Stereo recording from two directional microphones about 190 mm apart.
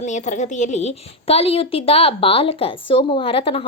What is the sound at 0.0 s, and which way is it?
A woman's voice, 40° left (ahead or behind).